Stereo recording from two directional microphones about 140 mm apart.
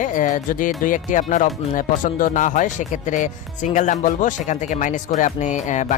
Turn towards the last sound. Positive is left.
turn(degrees=60)  # may be behind; listen again after turning